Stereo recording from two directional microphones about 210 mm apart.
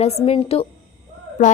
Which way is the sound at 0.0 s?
30° left (ahead or behind).